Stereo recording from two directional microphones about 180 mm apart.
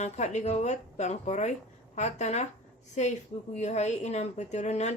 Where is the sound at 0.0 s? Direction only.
40° left (ahead or behind).